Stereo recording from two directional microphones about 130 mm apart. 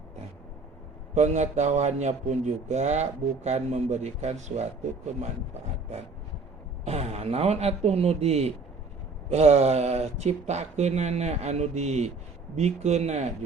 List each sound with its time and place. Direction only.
1.1 s speech: 60° right (ahead or behind)
6.8 s speech: 55° right (ahead or behind)